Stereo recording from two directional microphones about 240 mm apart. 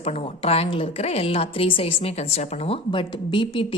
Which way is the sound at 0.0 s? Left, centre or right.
Left.